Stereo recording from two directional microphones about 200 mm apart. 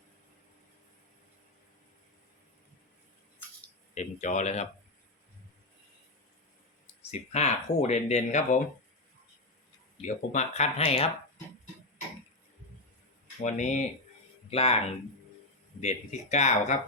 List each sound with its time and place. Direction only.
3.9 s speech: 35° left (ahead or behind)
7.1 s speech: 35° left (ahead or behind)
10.0 s speech: 35° left (ahead or behind)
13.4 s speech: 35° left (ahead or behind)
15.8 s speech: 35° left (ahead or behind)